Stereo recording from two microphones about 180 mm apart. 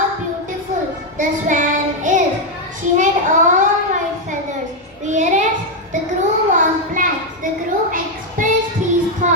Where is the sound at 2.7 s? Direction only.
45° right (ahead or behind).